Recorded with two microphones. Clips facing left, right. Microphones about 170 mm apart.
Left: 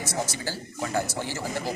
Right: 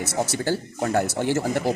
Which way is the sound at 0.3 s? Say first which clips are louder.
Right 9 dB; 55° right (ahead or behind).